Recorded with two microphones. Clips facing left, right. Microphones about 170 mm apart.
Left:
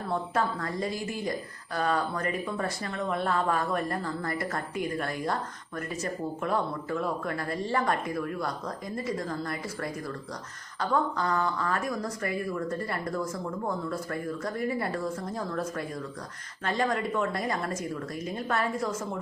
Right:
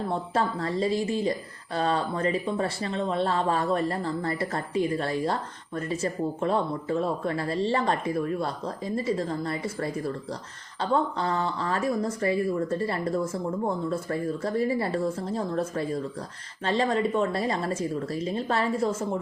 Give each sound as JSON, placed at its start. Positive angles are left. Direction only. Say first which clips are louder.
{"t": 0.1, "sound": "speech", "louder": "left 1 dB", "side_deg": -25}